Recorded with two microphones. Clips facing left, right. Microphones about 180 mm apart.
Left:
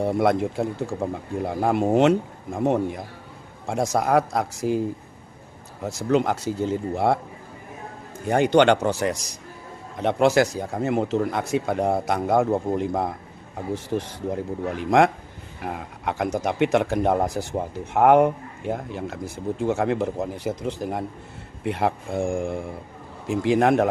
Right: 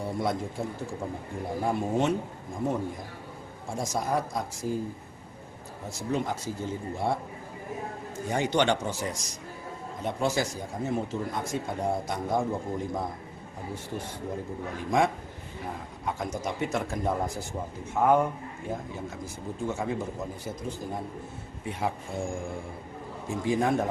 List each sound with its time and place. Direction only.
0.0 s speech: 70° left (ahead or behind)
5.9 s speech: 80° left
8.3 s speech: 60° left (ahead or behind)
13.7 s speech: 90° left
14.8 s a man's voice: 75° left (ahead or behind)
23.3 s speech: 75° left (ahead or behind)